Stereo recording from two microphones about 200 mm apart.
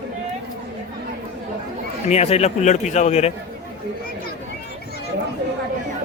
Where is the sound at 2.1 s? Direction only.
30° left (ahead or behind).